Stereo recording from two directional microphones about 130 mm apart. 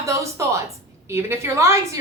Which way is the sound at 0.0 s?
25° right (ahead or behind).